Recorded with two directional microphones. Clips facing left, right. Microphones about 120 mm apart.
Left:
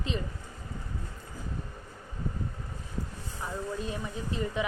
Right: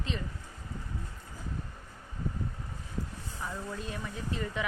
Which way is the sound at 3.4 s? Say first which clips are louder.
Left 4 dB; 20° left (ahead or behind).